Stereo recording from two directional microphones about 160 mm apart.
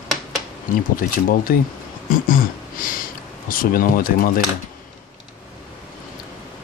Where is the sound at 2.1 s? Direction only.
60° left (ahead or behind).